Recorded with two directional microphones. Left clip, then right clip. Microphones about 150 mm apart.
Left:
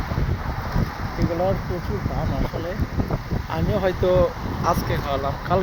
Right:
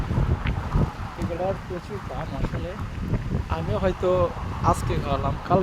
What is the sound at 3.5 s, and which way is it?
Speech, 30° right (ahead or behind).